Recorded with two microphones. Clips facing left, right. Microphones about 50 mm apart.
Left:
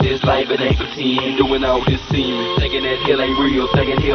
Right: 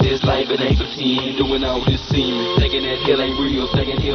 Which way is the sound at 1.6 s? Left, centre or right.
Left.